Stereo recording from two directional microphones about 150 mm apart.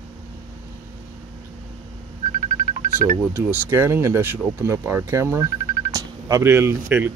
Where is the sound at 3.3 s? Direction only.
15° right (ahead or behind).